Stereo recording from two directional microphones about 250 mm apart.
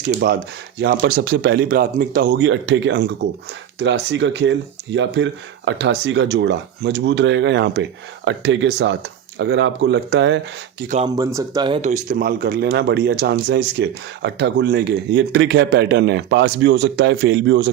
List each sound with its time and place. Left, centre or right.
0.8 s speech: right
11.1 s speech: centre; by 17.7 s right